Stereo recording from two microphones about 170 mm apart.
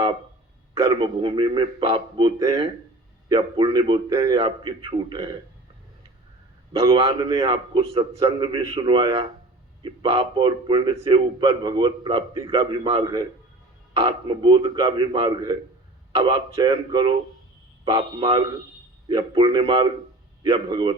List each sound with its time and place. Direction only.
0.7 s a man's voice: 25° right (ahead or behind)
6.8 s a man's voice: 25° right (ahead or behind)